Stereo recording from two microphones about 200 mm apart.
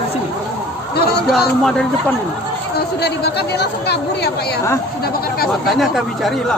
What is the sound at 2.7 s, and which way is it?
Speech, 55° left (ahead or behind).